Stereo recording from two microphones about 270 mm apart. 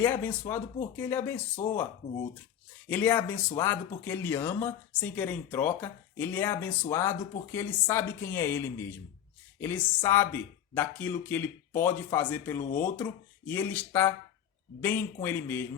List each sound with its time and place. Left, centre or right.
0.0 s speech: centre
1.6 s speech: left
2.9 s speech: centre